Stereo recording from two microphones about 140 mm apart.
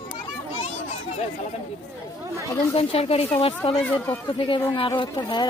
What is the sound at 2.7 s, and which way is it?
Speech, 45° left (ahead or behind).